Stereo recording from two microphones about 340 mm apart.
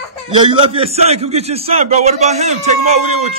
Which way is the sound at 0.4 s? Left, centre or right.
Centre.